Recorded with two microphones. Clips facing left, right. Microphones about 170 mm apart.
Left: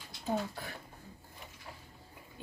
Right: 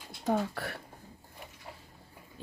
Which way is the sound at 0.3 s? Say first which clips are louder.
Right 5 dB; 75° right (ahead or behind).